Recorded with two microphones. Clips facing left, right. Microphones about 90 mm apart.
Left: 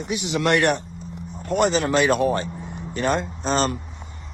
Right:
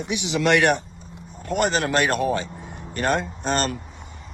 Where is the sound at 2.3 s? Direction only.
70° right (ahead or behind).